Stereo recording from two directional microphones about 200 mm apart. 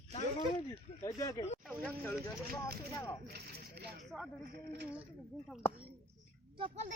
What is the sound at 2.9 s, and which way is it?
Speech, 15° left (ahead or behind).